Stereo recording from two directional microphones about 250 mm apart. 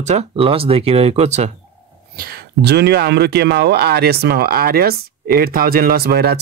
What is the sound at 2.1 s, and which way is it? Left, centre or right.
Speech, right.